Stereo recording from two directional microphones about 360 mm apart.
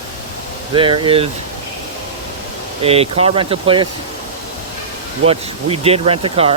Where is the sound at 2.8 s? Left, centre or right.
Centre.